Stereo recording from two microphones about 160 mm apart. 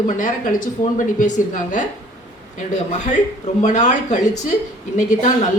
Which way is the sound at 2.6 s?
45° left (ahead or behind).